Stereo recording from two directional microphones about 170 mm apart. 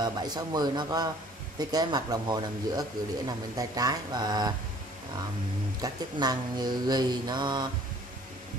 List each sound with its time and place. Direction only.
0.0 s speech: 25° right (ahead or behind)
5.8 s speech: 25° right (ahead or behind)